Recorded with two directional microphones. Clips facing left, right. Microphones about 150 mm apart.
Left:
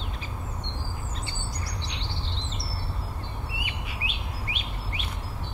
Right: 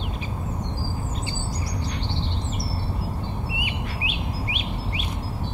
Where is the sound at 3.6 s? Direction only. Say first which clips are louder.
Right 6 dB; 15° right (ahead or behind).